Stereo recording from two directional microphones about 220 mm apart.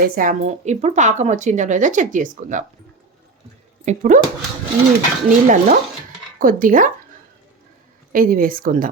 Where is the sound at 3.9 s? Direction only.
35° right (ahead or behind).